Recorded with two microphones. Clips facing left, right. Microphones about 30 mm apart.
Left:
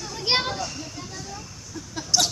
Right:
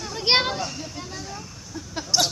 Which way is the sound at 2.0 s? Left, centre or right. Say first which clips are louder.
Even; centre.